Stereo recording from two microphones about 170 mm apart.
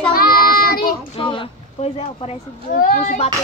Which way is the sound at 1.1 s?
30° left (ahead or behind).